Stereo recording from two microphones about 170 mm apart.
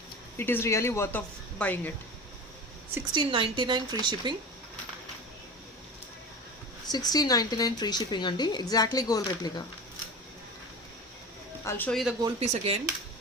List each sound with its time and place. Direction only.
0.3 s speech: 15° left (ahead or behind)
3.1 s a woman's voice: 30° right (ahead or behind)
6.9 s speech: 25° left (ahead or behind)
11.6 s speech: 15° left (ahead or behind)
11.9 s speech: centre (ahead or behind)
12.4 s speech: 40° right (ahead or behind)